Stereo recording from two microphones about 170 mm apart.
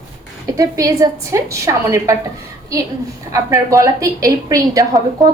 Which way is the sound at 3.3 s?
20° right (ahead or behind).